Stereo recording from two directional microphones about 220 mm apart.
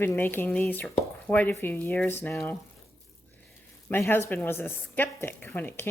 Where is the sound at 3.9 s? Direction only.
10° left (ahead or behind).